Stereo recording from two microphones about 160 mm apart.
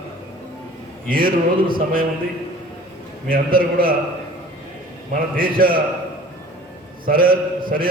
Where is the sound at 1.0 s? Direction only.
65° right (ahead or behind).